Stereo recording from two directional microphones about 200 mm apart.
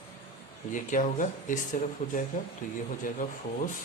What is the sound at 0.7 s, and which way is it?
Speech, 40° left (ahead or behind).